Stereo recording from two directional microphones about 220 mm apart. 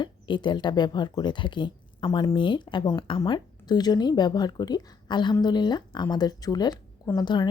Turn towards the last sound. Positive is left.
turn(degrees=20)  # may be behind; listen again after turning